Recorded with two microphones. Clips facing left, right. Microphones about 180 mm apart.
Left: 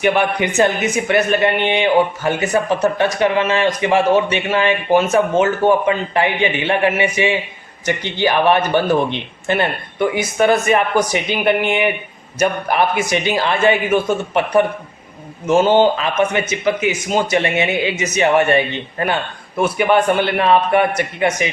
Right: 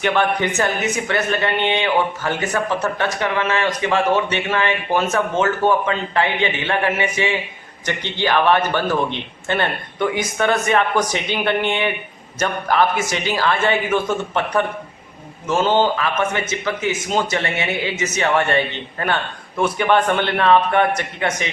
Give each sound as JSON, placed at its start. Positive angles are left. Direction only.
{"t": 0.0, "sound": "a man's voice", "side_deg": 15}